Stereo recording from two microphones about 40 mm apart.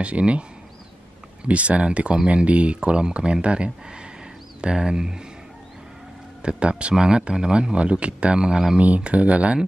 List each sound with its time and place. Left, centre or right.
0.0 s speech: right
6.4 s speech: right
8.7 s speech: right